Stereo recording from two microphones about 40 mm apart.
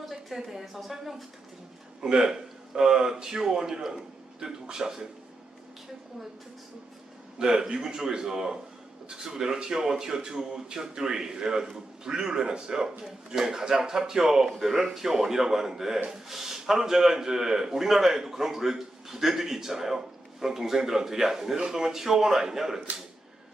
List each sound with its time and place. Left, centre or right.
0.0 s speech: centre
2.0 s speech: centre
7.3 s a man's voice: centre